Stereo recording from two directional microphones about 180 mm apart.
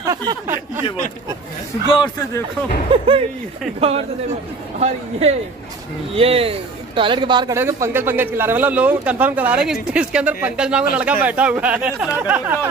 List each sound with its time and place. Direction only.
0.0 s speech: 20° right (ahead or behind)
2.9 s speech: 30° right (ahead or behind)
4.7 s a woman's voice: 35° right (ahead or behind)
7.5 s speech: 15° right (ahead or behind)